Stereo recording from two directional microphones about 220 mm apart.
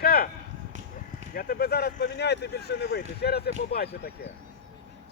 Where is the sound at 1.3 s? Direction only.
40° left (ahead or behind).